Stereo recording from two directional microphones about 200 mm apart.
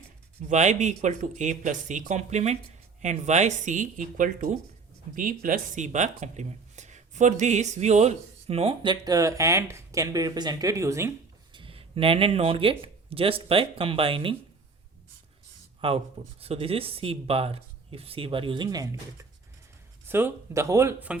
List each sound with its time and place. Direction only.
0.4 s speech: 35° right (ahead or behind); by 11.1 s 15° right (ahead or behind)
11.5 s speech: 25° right (ahead or behind)
15.8 s speech: 25° right (ahead or behind); by 21.2 s 10° right (ahead or behind)